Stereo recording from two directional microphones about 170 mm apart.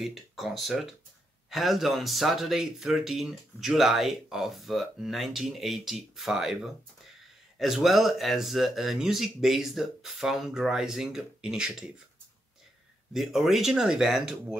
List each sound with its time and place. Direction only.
0.0 s speech: centre (ahead or behind)
13.1 s speech: centre (ahead or behind)